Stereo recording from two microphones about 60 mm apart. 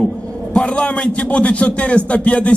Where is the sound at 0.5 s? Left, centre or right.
Centre.